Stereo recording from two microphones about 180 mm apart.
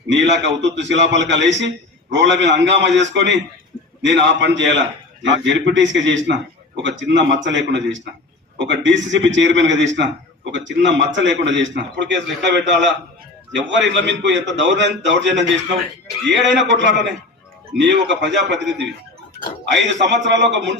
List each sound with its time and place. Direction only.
0.1 s a man's voice: 85° right
7.1 s a man's voice: 75° right (ahead or behind)
7.4 s a man's voice: 90° right
8.5 s a man's voice: 75° right (ahead or behind)